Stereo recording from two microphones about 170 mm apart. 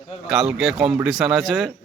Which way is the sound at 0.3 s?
5° right (ahead or behind).